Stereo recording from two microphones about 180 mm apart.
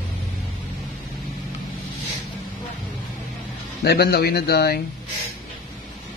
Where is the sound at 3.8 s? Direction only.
65° left (ahead or behind).